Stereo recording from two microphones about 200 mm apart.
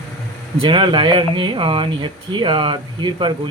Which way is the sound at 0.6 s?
25° right (ahead or behind).